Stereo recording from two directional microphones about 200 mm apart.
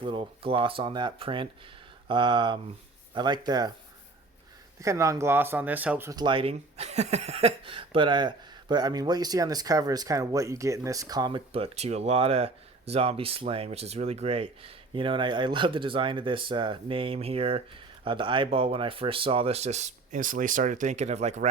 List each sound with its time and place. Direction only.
0.0 s speech: 25° right (ahead or behind)
4.8 s speech: 15° right (ahead or behind); by 21.5 s 35° right (ahead or behind)